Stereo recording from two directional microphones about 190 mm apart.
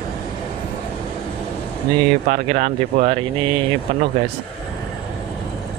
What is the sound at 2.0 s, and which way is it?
Speech, 35° right (ahead or behind).